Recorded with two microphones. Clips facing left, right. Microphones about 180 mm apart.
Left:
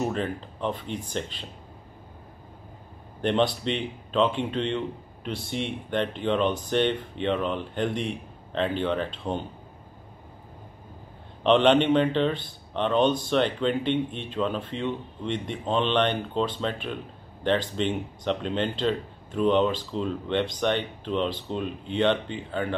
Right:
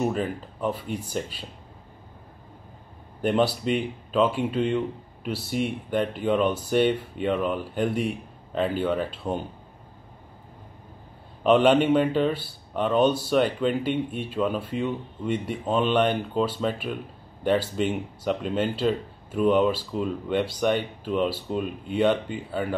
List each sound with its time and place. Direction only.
0.0 s speech: 5° right (ahead or behind)
3.2 s speech: 5° right (ahead or behind)
11.4 s speech: 5° right (ahead or behind)